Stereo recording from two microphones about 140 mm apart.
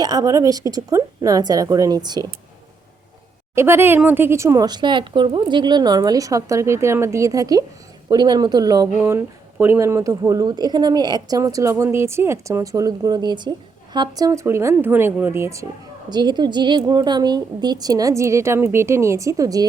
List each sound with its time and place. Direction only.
0.0 s a woman's voice: 30° right (ahead or behind)
3.5 s a woman's voice: 20° right (ahead or behind)
9.0 s a woman's voice: 15° right (ahead or behind)
16.0 s a woman's voice: 30° right (ahead or behind)